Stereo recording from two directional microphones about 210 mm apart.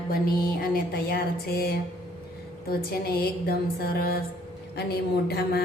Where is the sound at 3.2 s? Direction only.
45° left (ahead or behind).